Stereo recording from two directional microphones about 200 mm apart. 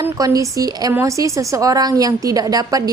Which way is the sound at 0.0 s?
15° right (ahead or behind).